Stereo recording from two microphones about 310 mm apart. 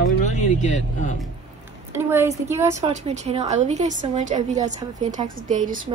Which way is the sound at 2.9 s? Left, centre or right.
Right.